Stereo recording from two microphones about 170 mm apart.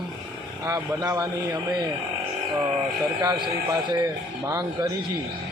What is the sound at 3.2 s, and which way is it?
A man's voice, 25° right (ahead or behind).